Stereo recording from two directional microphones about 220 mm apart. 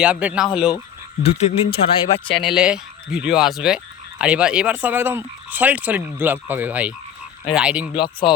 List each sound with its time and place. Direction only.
0.0 s speech: 5° right (ahead or behind)
1.2 s speech: 30° left (ahead or behind)
2.4 s speech: 5° right (ahead or behind)
7.9 s speech: 20° left (ahead or behind)